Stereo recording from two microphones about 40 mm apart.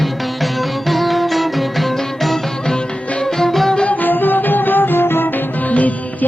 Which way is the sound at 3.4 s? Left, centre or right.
Centre.